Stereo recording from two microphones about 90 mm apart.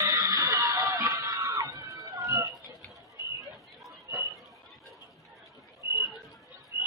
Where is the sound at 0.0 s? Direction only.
35° right (ahead or behind).